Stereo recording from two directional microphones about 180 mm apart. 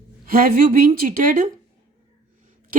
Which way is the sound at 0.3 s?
55° right (ahead or behind).